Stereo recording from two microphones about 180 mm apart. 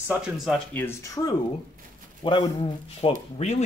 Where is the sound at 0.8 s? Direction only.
20° left (ahead or behind).